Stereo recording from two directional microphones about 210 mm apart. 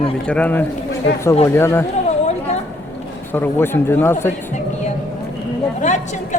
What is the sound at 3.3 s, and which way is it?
A man's voice, 10° left (ahead or behind).